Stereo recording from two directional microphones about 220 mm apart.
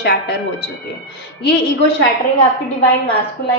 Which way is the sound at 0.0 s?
50° left (ahead or behind).